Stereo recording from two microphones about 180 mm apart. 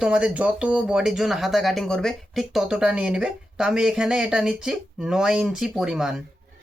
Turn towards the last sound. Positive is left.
turn(degrees=-5)  # may be behind; listen again after turning